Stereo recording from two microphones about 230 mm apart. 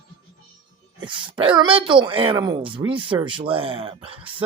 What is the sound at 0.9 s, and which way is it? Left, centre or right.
Speech, right.